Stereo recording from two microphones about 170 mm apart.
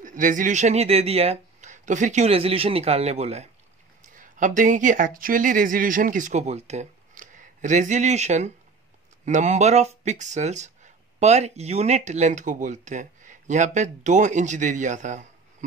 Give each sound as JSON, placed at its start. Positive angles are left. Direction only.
{"t": 0.0, "sound": "speech", "side_deg": -50}
{"t": 4.0, "sound": "speech", "side_deg": -50}